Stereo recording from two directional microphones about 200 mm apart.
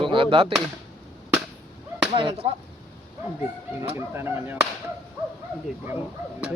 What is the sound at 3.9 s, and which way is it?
Whip, 10° right (ahead or behind).